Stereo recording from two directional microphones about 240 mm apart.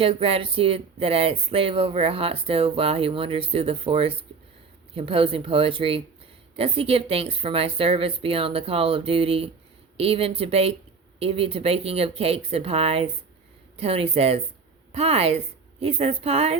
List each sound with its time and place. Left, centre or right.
0.0 s speech: right